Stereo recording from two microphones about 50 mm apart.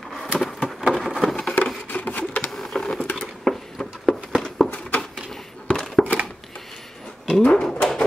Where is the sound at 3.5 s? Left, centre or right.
Centre.